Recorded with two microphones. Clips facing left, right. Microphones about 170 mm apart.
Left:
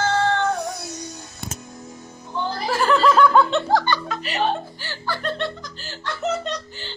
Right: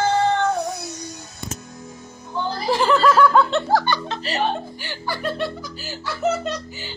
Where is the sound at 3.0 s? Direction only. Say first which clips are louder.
Left 1 dB; centre (ahead or behind).